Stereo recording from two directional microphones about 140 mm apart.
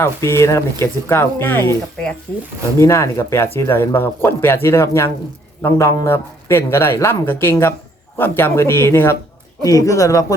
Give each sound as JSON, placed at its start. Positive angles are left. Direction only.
{"t": 0.0, "sound": "speech", "side_deg": 20}